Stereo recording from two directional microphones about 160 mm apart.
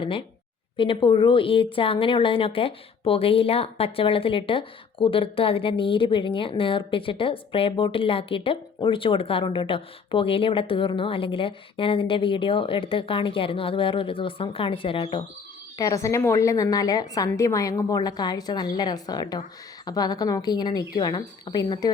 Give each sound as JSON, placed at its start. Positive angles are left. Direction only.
{"t": 0.0, "sound": "a woman's voice", "side_deg": 35}
{"t": 15.8, "sound": "a woman's voice", "side_deg": 20}